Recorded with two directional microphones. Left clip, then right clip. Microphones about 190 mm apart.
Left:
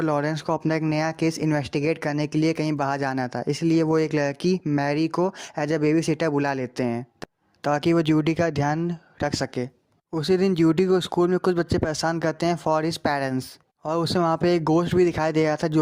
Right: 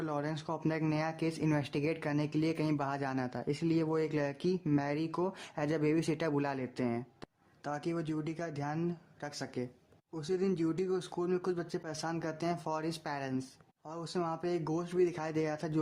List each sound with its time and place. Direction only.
0.0 s speech: 40° left (ahead or behind)